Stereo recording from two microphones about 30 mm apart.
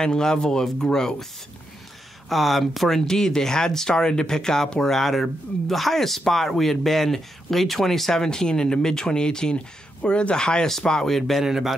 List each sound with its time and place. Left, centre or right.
0.0 s speech: left
2.2 s speech: centre
3.1 s speech: centre
4.9 s speech: centre
8.2 s speech: left
11.1 s speech: centre
11.4 s a man's voice: centre